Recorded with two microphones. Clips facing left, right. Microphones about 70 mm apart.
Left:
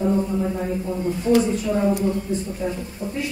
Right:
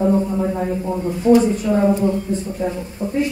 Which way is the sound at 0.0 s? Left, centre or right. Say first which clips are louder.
Right 4 dB; right.